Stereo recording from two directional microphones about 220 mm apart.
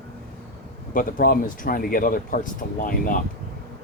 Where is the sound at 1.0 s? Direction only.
40° left (ahead or behind).